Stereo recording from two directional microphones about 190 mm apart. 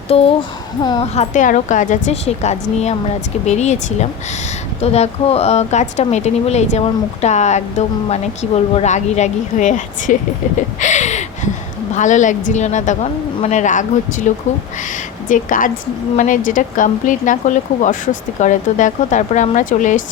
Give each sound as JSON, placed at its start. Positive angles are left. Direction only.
{"t": 0.1, "sound": "a woman's voice", "side_deg": 30}
{"t": 1.1, "sound": "speech", "side_deg": 35}
{"t": 10.8, "sound": "a sound", "side_deg": 40}
{"t": 11.9, "sound": "a woman's voice", "side_deg": 40}